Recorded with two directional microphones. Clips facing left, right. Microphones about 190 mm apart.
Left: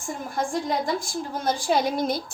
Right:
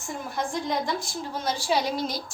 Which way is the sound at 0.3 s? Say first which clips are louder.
Left 3 dB; 45° left (ahead or behind).